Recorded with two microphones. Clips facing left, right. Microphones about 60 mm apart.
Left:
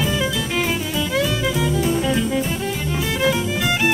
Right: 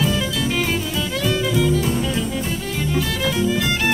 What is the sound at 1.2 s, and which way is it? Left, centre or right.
Music, centre.